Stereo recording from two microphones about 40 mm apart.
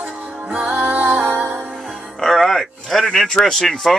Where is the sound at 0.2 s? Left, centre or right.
Right.